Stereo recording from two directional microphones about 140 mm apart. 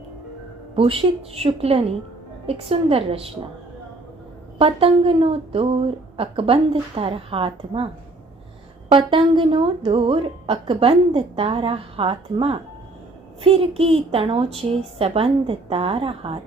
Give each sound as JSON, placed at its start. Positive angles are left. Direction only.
{"t": 0.8, "sound": "a woman's voice", "side_deg": -40}
{"t": 4.5, "sound": "a woman's voice", "side_deg": -40}
{"t": 8.9, "sound": "a woman's voice", "side_deg": -40}